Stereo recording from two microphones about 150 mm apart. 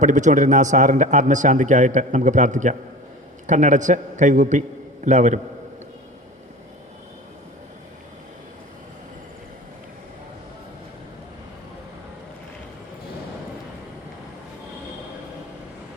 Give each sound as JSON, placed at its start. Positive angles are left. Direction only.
{"t": 0.0, "sound": "a man's voice", "side_deg": -55}